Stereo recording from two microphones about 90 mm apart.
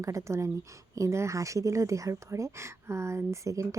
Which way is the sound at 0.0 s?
35° right (ahead or behind).